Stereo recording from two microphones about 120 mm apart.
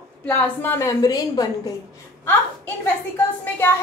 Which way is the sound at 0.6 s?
20° left (ahead or behind).